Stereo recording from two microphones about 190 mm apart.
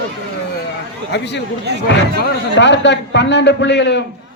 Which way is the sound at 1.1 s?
65° left (ahead or behind).